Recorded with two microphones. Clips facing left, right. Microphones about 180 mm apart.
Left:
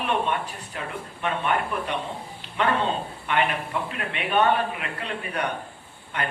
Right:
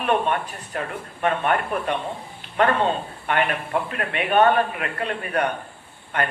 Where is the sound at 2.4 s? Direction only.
50° right (ahead or behind).